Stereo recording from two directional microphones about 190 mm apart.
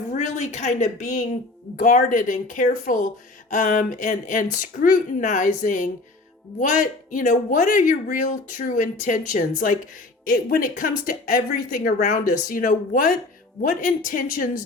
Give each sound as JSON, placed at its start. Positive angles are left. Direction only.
{"t": 0.1, "sound": "a woman's voice", "side_deg": 40}